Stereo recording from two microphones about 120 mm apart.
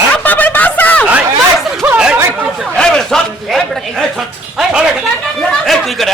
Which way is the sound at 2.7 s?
5° left (ahead or behind).